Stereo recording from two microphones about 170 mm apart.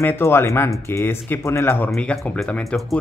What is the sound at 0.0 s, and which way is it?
Speech, 10° left (ahead or behind).